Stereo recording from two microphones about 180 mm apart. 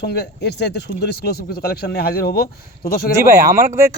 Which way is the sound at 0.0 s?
65° left (ahead or behind).